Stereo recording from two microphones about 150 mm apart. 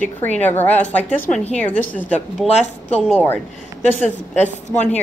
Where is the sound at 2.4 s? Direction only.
45° left (ahead or behind).